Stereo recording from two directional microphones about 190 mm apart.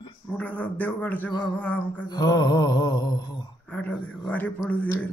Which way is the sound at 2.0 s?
20° left (ahead or behind).